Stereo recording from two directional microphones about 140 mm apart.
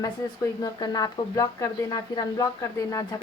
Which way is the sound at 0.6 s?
25° left (ahead or behind).